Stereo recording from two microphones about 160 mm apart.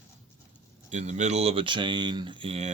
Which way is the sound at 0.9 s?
45° right (ahead or behind).